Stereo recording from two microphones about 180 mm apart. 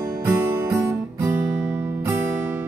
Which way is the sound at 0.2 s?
15° right (ahead or behind).